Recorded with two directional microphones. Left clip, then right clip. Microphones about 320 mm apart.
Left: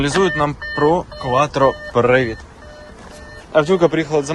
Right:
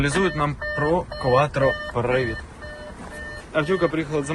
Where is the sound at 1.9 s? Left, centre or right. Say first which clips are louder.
Left 9 dB; left.